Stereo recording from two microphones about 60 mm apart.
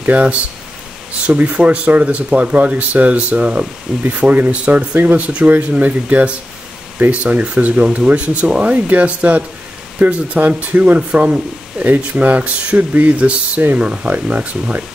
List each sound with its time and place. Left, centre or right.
0.0 s speech: right